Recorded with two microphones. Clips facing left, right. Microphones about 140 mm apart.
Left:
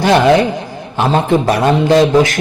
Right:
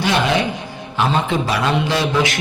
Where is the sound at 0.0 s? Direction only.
50° left (ahead or behind).